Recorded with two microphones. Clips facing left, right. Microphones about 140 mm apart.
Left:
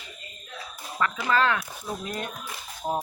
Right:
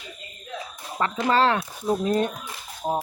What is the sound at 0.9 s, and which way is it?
Speech, 30° right (ahead or behind).